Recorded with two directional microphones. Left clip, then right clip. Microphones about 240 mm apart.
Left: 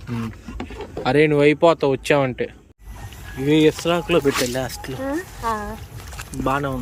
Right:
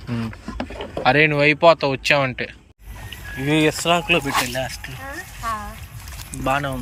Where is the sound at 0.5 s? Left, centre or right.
Centre.